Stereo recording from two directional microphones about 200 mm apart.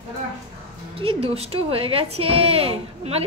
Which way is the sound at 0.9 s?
30° right (ahead or behind).